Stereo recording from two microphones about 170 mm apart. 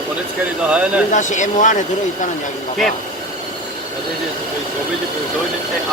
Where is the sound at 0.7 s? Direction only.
5° right (ahead or behind).